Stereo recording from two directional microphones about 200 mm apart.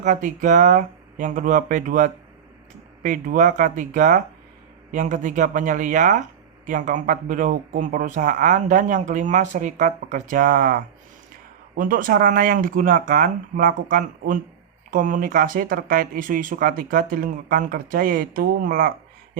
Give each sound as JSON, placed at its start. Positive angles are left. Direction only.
{"t": 0.0, "sound": "speech", "side_deg": -40}
{"t": 11.8, "sound": "speech", "side_deg": -45}